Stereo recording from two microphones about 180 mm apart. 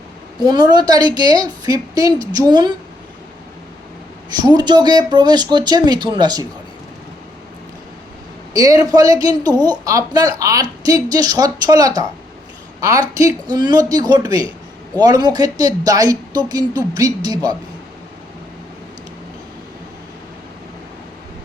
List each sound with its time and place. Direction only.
0.4 s speech: 25° right (ahead or behind)
4.3 s speech: 25° right (ahead or behind)
8.5 s speech: 20° right (ahead or behind)